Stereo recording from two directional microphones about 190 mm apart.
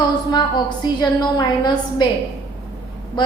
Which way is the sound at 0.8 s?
20° left (ahead or behind).